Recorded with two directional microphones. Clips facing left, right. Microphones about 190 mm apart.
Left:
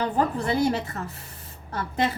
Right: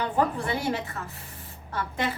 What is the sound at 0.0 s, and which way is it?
A woman's voice, 40° left (ahead or behind).